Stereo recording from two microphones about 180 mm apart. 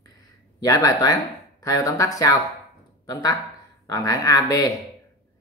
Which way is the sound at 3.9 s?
20° left (ahead or behind).